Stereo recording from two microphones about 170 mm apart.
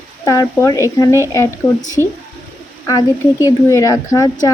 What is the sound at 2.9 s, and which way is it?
Speech, 20° left (ahead or behind).